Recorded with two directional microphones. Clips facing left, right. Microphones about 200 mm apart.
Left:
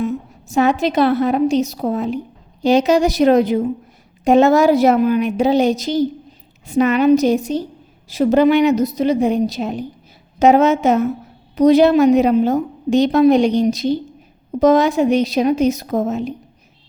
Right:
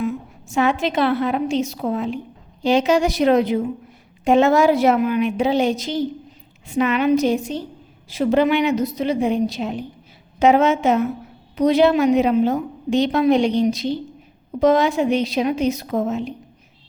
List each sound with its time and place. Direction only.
0.0 s a woman's voice: 40° left (ahead or behind)